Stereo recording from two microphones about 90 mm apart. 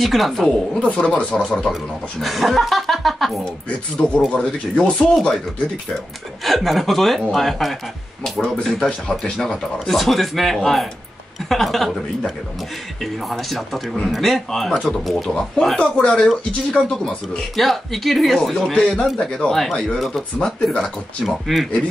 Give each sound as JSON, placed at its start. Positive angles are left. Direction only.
{"t": 0.0, "sound": "speech", "side_deg": 0}
{"t": 4.3, "sound": "speech", "side_deg": 15}
{"t": 6.4, "sound": "speech", "side_deg": 0}
{"t": 13.0, "sound": "speech", "side_deg": 0}